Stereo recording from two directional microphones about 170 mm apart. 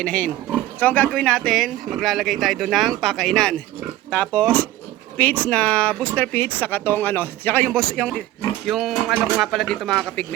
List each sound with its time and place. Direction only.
0.0 s speech: 5° left (ahead or behind)